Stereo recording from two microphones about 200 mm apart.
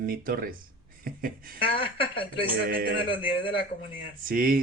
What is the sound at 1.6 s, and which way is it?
Speech, 25° left (ahead or behind).